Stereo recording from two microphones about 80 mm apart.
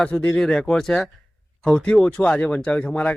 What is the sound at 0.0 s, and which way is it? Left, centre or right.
Speech, centre.